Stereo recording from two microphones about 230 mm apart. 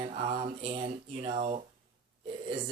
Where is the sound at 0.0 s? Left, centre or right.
Right.